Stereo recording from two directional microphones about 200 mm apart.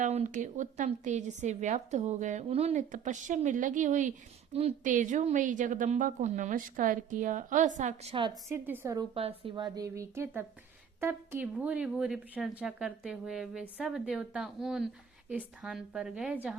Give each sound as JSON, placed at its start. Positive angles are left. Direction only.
{"t": 0.0, "sound": "a woman's voice", "side_deg": -35}
{"t": 8.4, "sound": "a woman's voice", "side_deg": -10}
{"t": 9.1, "sound": "speech", "side_deg": -30}